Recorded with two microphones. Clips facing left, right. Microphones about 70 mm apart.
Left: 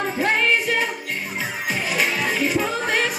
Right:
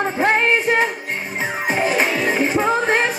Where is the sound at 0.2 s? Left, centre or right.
Right.